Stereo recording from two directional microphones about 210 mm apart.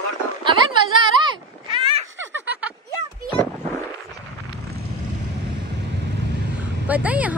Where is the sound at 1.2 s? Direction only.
20° right (ahead or behind).